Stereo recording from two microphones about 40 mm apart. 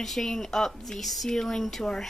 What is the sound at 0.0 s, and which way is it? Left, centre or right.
A woman's voice, centre.